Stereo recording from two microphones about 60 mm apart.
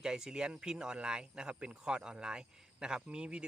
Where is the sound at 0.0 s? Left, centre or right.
Centre.